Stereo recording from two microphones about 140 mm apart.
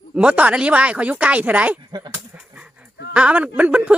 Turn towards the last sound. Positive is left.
turn(degrees=-10)  # may be behind; listen again after turning